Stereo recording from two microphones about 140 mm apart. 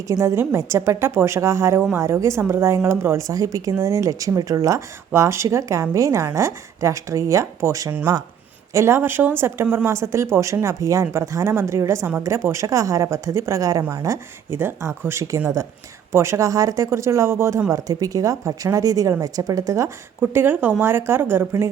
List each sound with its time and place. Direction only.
0.1 s a woman's voice: 20° right (ahead or behind)